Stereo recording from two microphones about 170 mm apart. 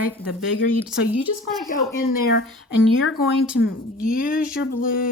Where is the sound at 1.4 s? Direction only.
55° left (ahead or behind).